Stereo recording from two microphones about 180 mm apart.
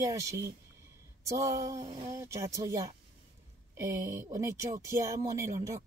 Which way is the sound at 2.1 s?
15° right (ahead or behind).